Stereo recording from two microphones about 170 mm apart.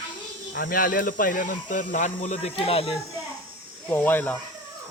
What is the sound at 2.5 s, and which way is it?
Speech, 35° left (ahead or behind).